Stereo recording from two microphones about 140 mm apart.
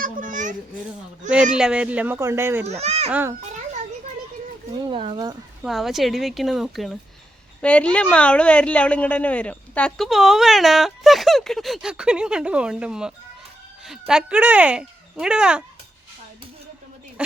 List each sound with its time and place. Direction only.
0.0 s a sound: 70° right (ahead or behind)
1.5 s speech: 5° right (ahead or behind)
2.6 s a child's voice: 50° right (ahead or behind)
3.1 s speech: 15° right (ahead or behind)
4.9 s speech: 40° right (ahead or behind)
5.6 s a woman's voice: centre (ahead or behind)
17.2 s speech: 10° right (ahead or behind)